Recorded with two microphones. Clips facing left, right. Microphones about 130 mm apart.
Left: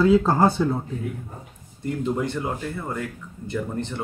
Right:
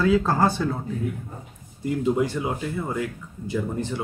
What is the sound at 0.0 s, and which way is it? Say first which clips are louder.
Speech: left 3 dB; 20° left (ahead or behind).